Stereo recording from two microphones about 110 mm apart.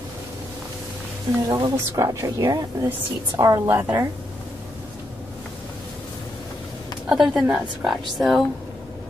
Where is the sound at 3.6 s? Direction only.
20° right (ahead or behind).